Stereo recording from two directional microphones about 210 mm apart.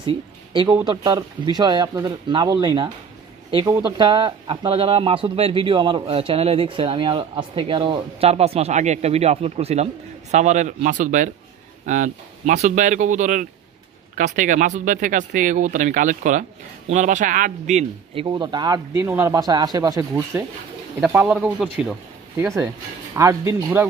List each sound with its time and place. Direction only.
0.0 s a sound: 25° right (ahead or behind)
0.8 s speech: 20° right (ahead or behind); by 21.9 s 5° right (ahead or behind)
22.4 s speech: 15° right (ahead or behind)